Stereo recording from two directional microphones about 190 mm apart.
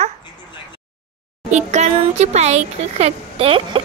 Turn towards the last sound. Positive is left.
turn(degrees=-30)  # may be behind; listen again after turning